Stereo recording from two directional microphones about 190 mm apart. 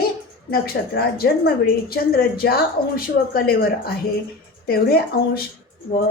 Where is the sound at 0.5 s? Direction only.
55° left (ahead or behind).